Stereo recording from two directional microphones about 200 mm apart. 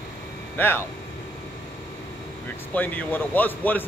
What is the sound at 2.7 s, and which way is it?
A man's voice, 10° left (ahead or behind).